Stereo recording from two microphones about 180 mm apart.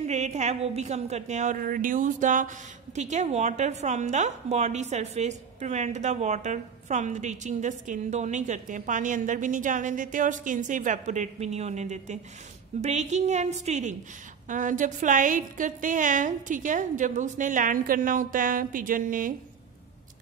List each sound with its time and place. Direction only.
0.0 s a woman's voice: 40° right (ahead or behind)